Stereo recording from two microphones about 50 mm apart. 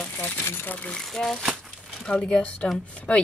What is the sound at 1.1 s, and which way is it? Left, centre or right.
Speech, centre.